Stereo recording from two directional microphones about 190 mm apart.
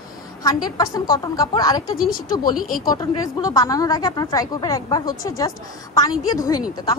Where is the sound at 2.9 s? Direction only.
20° left (ahead or behind).